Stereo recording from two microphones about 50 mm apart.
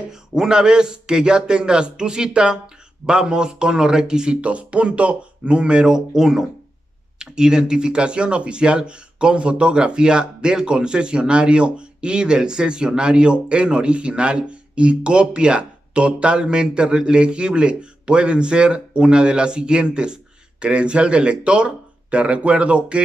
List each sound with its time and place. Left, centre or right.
0.1 s a man's voice: centre